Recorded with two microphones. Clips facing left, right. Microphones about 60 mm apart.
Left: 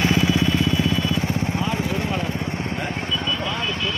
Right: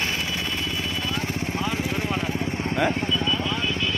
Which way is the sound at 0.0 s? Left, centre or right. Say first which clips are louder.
Left 8 dB; centre.